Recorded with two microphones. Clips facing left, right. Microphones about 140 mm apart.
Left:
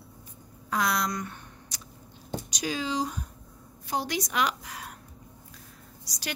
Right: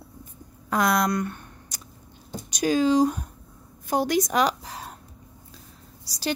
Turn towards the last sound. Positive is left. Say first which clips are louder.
# right 9 dB
turn(degrees=-30)  # may be behind; listen again after turning